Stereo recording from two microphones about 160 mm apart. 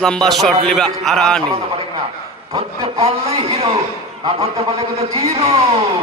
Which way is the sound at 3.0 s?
40° right (ahead or behind).